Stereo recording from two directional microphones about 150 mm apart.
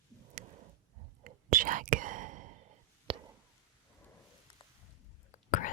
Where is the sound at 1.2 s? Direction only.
65° right (ahead or behind).